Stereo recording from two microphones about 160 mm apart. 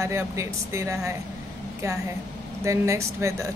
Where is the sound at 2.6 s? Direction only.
20° right (ahead or behind).